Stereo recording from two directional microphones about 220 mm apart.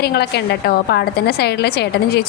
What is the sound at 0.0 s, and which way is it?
A woman's voice, 45° left (ahead or behind).